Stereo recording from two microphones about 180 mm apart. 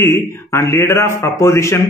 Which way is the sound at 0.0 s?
15° left (ahead or behind).